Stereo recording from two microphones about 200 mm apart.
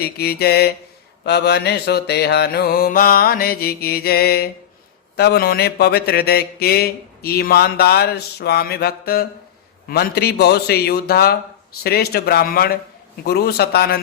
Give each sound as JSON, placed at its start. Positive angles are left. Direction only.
{"t": 0.0, "sound": "mantra", "side_deg": 50}